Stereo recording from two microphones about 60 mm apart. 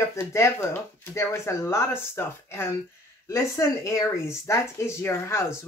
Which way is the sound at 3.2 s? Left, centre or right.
Left.